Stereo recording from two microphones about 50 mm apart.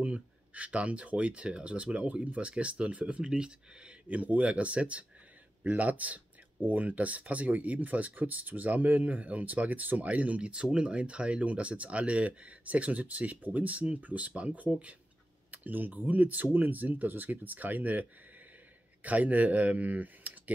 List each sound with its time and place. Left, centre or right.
0.0 s speech: right
4.2 s speech: right
19.0 s speech: right